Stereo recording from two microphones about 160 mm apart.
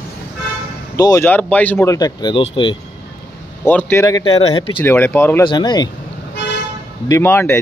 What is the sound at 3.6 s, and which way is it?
Speech, 10° left (ahead or behind).